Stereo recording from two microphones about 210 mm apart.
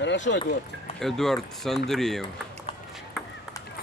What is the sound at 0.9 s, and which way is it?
Speech, centre (ahead or behind).